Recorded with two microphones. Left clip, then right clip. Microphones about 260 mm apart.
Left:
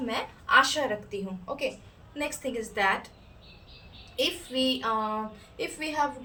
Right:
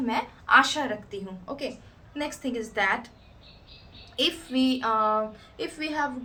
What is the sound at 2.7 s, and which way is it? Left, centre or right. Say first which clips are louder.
Speech: right 1 dB; centre.